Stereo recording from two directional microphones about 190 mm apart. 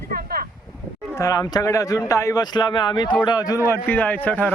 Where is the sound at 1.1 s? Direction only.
15° left (ahead or behind).